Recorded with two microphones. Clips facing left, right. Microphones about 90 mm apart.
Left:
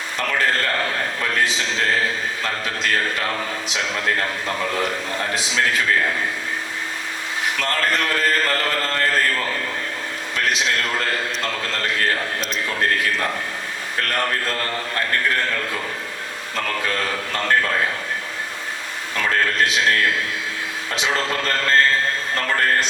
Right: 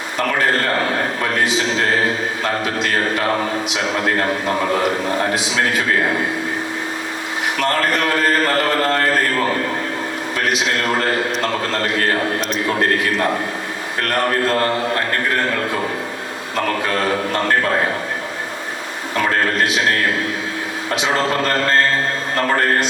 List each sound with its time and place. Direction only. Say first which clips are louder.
0.3 s a man's voice: right 3 dB; 35° right (ahead or behind)
7.6 s a man's voice: right 5 dB; 35° right (ahead or behind)
10.3 s a man's voice: right 2 dB; 35° right (ahead or behind)
16.6 s a man's voice: right 5 dB; 35° right (ahead or behind)
19.1 s a man's voice: right 3 dB; 35° right (ahead or behind)
21.0 s a man's voice: right 4 dB; 35° right (ahead or behind)